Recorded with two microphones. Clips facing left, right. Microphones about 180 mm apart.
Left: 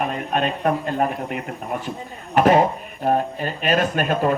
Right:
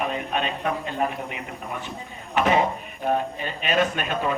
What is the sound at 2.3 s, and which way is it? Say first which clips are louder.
Speech: left 5 dB; 45° left (ahead or behind).